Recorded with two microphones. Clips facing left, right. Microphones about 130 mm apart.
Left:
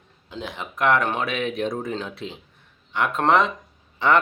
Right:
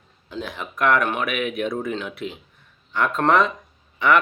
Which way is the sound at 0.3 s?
25° left (ahead or behind).